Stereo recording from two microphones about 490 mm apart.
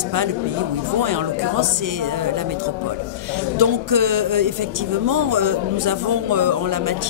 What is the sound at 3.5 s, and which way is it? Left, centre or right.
Speech, right.